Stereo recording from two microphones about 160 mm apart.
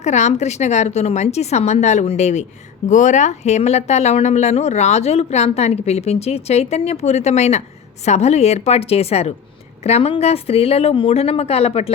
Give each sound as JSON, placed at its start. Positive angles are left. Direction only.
{"t": 0.0, "sound": "a woman's voice", "side_deg": 45}